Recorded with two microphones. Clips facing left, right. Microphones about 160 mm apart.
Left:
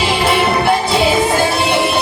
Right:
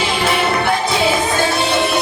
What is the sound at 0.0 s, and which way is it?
Music, 30° left (ahead or behind).